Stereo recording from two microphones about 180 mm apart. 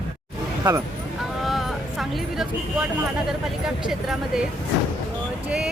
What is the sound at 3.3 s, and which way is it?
Speech, centre (ahead or behind).